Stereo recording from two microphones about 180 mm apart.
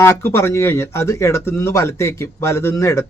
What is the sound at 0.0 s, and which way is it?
Speech, 15° left (ahead or behind).